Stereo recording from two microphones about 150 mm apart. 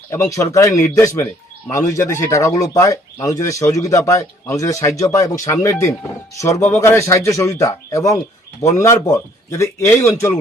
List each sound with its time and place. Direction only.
0.1 s speech: 20° left (ahead or behind)